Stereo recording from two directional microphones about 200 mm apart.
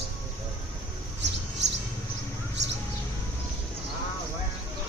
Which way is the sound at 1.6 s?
60° right (ahead or behind).